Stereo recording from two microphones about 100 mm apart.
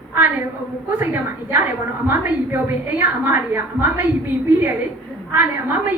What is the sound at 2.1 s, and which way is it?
A woman's voice, 20° right (ahead or behind).